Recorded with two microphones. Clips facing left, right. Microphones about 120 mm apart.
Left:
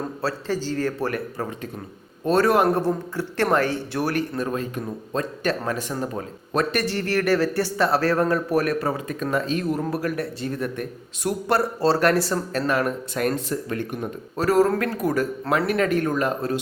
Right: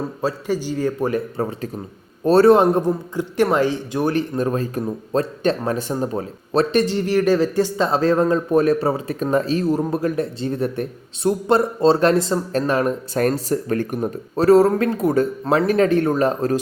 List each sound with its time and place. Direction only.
0.2 s a man's voice: 15° right (ahead or behind)
2.6 s a man's voice: 15° right (ahead or behind)
4.4 s speech: 35° right (ahead or behind)